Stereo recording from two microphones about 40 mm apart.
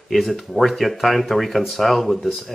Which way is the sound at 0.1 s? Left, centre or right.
Centre.